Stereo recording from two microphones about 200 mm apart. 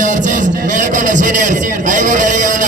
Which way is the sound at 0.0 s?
40° right (ahead or behind).